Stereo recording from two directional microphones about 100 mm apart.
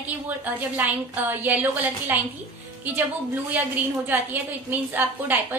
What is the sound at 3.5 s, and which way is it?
A woman's voice, 20° right (ahead or behind).